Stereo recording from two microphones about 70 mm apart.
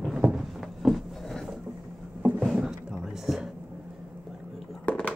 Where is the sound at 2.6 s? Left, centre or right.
Centre.